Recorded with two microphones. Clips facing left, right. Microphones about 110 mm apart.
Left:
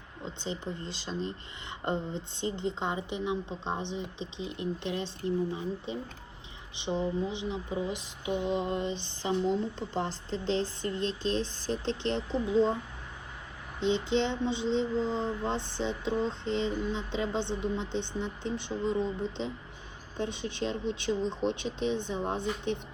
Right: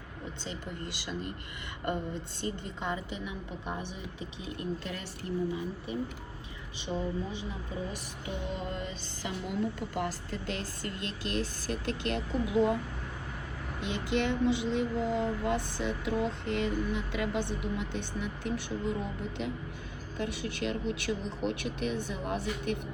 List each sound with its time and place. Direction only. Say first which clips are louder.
0.4 s speech: left 4 dB; 20° left (ahead or behind)
13.8 s speech: left 3 dB; 20° left (ahead or behind)